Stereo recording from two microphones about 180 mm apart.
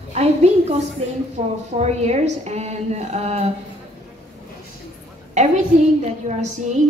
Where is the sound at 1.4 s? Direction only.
45° right (ahead or behind).